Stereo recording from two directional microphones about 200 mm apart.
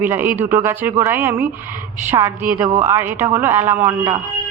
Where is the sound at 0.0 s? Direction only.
10° right (ahead or behind).